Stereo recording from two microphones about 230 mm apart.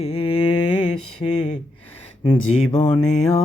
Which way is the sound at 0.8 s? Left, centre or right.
Left.